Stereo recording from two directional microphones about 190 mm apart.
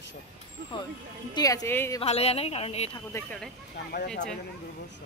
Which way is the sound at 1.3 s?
20° left (ahead or behind).